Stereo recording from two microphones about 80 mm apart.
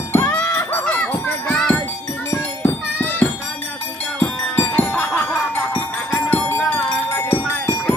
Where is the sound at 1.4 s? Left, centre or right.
Centre.